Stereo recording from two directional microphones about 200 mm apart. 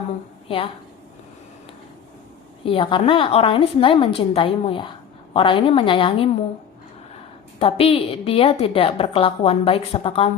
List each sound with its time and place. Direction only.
0.4 s a woman's voice: 25° left (ahead or behind)
2.6 s a woman's voice: 25° left (ahead or behind)
7.6 s a woman's voice: 30° left (ahead or behind)